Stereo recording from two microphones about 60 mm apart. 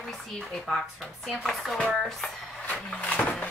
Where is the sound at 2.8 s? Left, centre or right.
Left.